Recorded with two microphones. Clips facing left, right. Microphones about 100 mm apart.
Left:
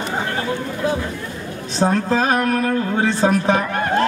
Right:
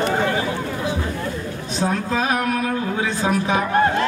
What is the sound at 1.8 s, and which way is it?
A man's voice, 35° left (ahead or behind).